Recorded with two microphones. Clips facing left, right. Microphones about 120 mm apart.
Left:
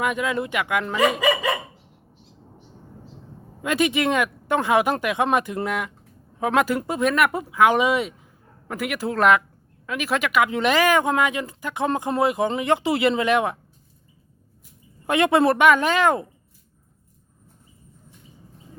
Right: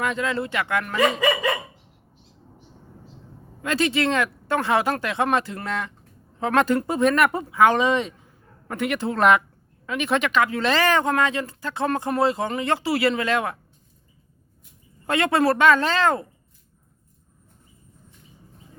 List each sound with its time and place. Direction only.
0.0 s speech: 15° left (ahead or behind)
3.6 s speech: 15° left (ahead or behind)
15.0 s speech: 15° left (ahead or behind)